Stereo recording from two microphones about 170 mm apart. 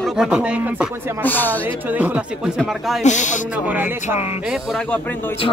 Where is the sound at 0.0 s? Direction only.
5° right (ahead or behind).